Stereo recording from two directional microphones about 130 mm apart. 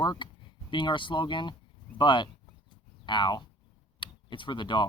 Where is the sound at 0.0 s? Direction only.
35° left (ahead or behind).